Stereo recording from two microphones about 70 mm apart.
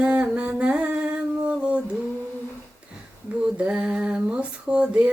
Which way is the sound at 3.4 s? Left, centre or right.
Centre.